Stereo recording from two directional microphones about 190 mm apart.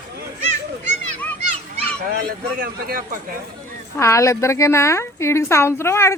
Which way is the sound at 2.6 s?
50° right (ahead or behind).